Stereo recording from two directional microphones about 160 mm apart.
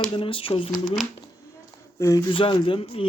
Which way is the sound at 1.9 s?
20° left (ahead or behind).